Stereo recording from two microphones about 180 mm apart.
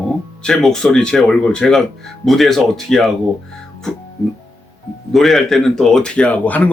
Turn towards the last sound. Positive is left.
turn(degrees=10)  # may be behind; listen again after turning